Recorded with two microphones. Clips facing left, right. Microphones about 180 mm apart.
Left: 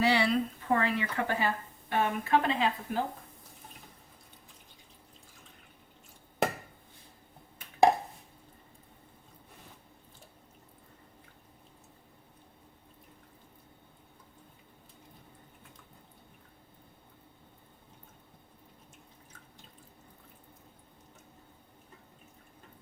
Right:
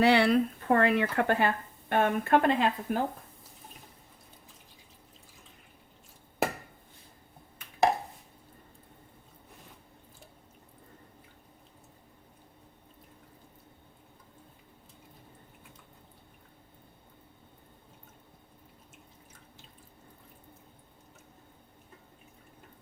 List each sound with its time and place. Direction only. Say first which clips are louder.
0.0 s speech: right 4 dB; 60° right (ahead or behind)